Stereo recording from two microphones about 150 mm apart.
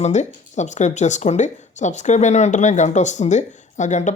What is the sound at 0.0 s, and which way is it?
Speech, 50° left (ahead or behind).